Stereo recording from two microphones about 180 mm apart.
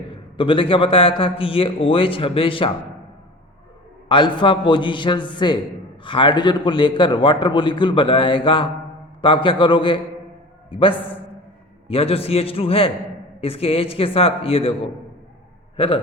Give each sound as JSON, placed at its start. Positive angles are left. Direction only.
{"t": 0.1, "sound": "a man's voice", "side_deg": 30}
{"t": 4.1, "sound": "a man's voice", "side_deg": 25}
{"t": 10.9, "sound": "a man's voice", "side_deg": 10}
{"t": 11.9, "sound": "a man's voice", "side_deg": 30}